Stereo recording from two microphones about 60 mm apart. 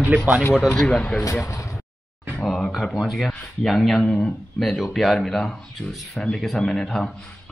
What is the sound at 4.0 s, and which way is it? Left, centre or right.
Speech, centre.